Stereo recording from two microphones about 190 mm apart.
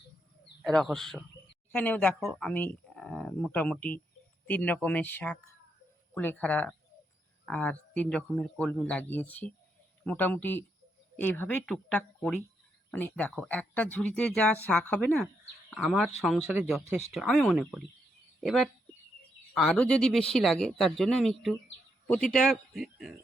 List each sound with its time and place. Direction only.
0.6 s speech: centre (ahead or behind)